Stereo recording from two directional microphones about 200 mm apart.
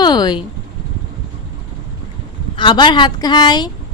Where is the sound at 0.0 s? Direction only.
20° left (ahead or behind).